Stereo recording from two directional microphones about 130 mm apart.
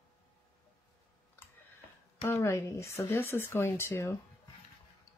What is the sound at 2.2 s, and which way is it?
Speech, 20° left (ahead or behind).